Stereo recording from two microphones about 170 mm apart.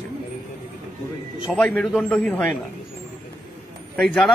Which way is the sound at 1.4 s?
5° left (ahead or behind).